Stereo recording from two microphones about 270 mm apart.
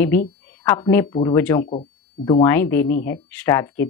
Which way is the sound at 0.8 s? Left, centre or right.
Centre.